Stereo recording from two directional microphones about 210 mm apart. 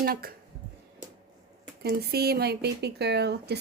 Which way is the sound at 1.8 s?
50° right (ahead or behind).